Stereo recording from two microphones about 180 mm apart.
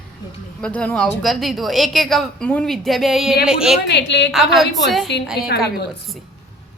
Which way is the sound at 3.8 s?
75° left (ahead or behind).